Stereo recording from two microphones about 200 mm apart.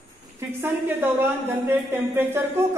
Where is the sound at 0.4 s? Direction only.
10° right (ahead or behind).